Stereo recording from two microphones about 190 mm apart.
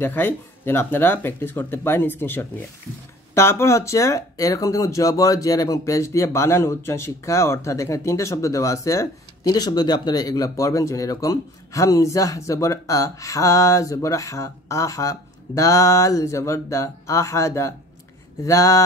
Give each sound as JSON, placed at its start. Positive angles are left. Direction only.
{"t": 0.0, "sound": "speech", "side_deg": 10}